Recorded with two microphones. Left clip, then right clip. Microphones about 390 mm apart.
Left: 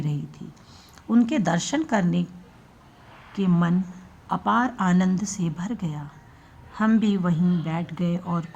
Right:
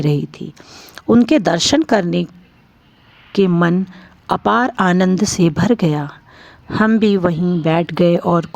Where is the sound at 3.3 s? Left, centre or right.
Right.